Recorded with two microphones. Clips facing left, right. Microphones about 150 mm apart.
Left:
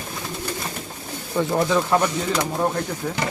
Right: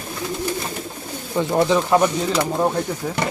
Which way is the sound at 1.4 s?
20° right (ahead or behind).